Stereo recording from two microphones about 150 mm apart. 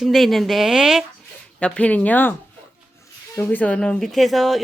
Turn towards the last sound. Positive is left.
turn(degrees=0)  # may be behind; listen again after turning